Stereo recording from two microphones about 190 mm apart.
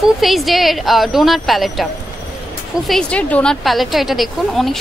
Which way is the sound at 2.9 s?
5° left (ahead or behind).